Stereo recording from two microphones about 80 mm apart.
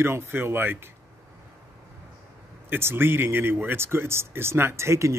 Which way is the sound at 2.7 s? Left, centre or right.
Right.